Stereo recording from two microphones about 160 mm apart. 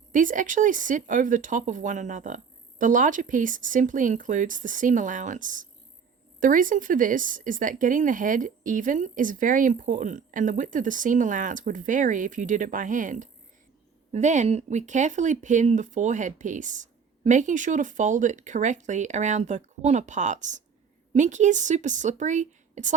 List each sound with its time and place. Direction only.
0.1 s speech: 55° right (ahead or behind)